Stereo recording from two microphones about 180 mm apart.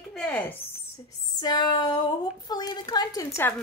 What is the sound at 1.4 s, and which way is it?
A woman's voice, 20° left (ahead or behind).